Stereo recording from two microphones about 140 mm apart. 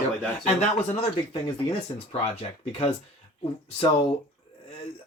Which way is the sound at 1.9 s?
35° left (ahead or behind).